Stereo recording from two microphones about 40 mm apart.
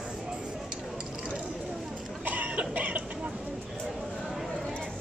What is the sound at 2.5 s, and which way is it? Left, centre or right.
Chicken, right.